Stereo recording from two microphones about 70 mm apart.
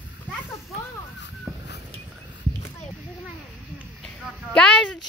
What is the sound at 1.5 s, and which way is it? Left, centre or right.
Crow, centre.